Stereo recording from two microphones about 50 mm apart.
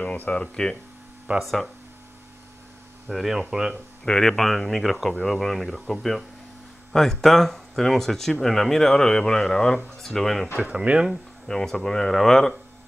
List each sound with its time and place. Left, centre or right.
0.0 s speech: left
1.4 s speech: centre
3.1 s speech: centre
3.4 s speech: centre
3.7 s speech: centre
10.6 s speech: right
11.4 s speech: centre